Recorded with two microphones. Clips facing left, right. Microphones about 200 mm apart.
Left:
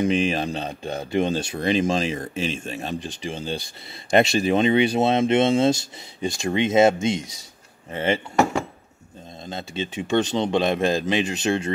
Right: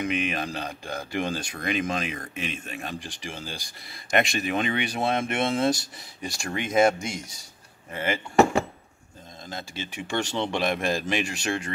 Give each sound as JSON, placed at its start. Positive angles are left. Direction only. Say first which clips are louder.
{"t": 0.0, "sound": "speech", "louder": "left 6 dB", "side_deg": 30}
{"t": 9.5, "sound": "speech", "louder": "left 7 dB", "side_deg": 25}